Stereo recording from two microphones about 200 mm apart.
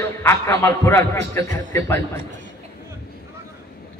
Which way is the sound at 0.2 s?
15° left (ahead or behind).